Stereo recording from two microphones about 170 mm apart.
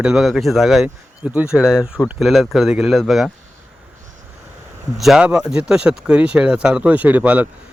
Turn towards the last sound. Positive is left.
turn(degrees=-10)  # may be behind; listen again after turning